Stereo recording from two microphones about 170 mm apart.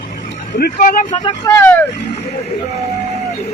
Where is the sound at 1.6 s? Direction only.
10° left (ahead or behind).